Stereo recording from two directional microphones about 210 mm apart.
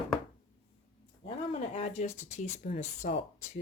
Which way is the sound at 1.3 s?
25° left (ahead or behind).